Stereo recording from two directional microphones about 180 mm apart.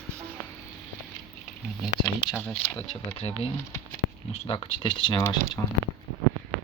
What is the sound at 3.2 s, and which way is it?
Speech, 35° left (ahead or behind).